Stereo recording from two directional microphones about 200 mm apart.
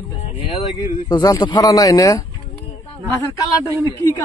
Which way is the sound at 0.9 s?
20° left (ahead or behind).